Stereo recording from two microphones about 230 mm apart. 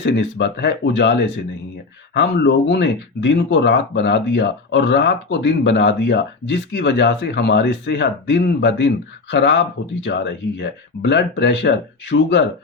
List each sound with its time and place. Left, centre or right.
0.0 s speech: left